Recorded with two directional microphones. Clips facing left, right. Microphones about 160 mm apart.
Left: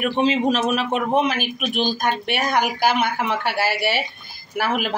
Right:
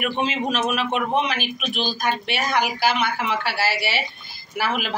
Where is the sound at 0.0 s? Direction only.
35° left (ahead or behind).